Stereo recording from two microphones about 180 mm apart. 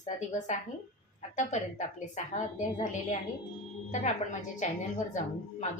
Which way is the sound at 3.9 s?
40° left (ahead or behind).